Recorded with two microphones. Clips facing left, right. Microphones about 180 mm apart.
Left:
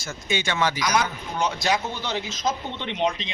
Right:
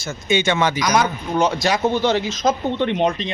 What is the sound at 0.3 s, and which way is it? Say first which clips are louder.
Speech: right 8 dB; 20° right (ahead or behind).